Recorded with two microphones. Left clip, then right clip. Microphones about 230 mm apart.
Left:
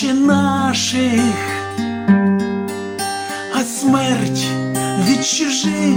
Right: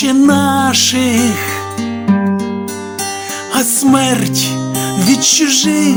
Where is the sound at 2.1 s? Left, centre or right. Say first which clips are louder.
Even; right.